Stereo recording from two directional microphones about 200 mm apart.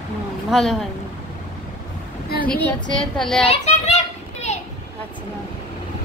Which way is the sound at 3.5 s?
35° left (ahead or behind).